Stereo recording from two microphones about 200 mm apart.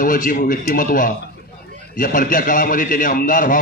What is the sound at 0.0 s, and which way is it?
A man's voice, 45° left (ahead or behind).